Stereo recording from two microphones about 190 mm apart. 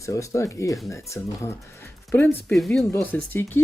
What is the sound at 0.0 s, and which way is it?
Speech, 15° left (ahead or behind).